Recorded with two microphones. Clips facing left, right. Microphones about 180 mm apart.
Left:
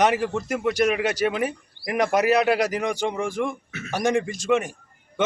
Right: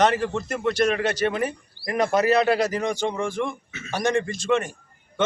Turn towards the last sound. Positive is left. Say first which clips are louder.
# left 2 dB
turn(degrees=10)  # may be behind; listen again after turning